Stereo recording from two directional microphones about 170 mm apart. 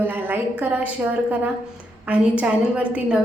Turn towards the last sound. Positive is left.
turn(degrees=-10)  # may be behind; listen again after turning